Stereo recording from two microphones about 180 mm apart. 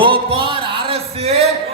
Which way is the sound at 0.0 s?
30° right (ahead or behind).